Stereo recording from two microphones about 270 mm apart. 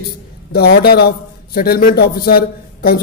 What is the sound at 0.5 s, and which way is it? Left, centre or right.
A woman's voice, left.